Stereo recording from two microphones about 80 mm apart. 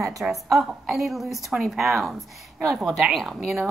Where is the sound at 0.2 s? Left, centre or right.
Centre.